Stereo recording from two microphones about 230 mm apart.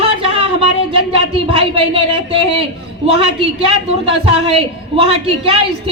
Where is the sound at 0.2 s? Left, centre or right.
Right.